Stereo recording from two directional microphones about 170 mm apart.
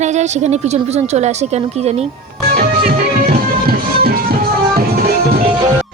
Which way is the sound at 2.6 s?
60° right (ahead or behind).